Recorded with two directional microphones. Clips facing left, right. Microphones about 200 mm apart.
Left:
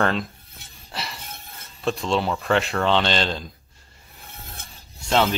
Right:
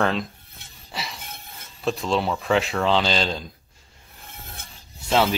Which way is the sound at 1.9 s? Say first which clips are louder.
Even; centre (ahead or behind).